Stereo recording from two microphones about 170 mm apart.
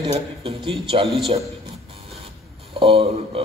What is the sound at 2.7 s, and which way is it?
Speech, 35° right (ahead or behind).